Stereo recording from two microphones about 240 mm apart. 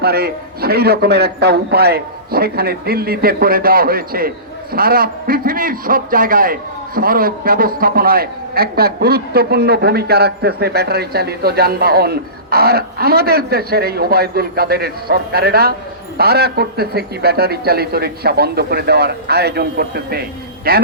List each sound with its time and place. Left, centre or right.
0.0 s a man's voice: right